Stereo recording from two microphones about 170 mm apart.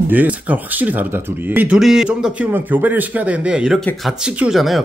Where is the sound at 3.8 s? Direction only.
5° left (ahead or behind).